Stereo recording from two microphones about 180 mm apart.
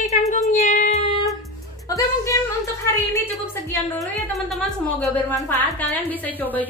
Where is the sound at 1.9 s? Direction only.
20° left (ahead or behind).